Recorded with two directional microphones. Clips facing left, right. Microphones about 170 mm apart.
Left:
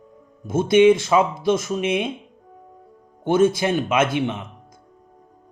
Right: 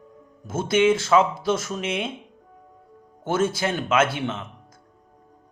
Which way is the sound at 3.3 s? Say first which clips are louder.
Left 6 dB; 15° left (ahead or behind).